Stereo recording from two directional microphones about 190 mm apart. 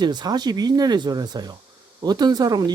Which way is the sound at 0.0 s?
20° right (ahead or behind).